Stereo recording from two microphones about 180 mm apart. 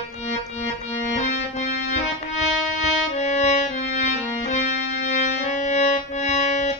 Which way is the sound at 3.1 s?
40° left (ahead or behind).